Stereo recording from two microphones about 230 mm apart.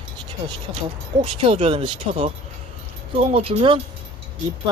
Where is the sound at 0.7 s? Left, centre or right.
Centre.